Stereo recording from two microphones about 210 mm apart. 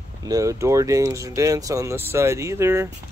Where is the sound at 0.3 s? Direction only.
15° right (ahead or behind).